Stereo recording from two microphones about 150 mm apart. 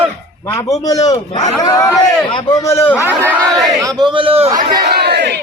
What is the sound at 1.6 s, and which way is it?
A man's voice, 25° left (ahead or behind).